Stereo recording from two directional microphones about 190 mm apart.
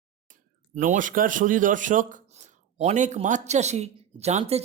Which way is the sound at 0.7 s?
40° right (ahead or behind).